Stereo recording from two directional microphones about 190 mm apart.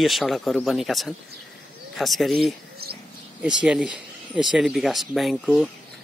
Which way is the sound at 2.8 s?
55° right (ahead or behind).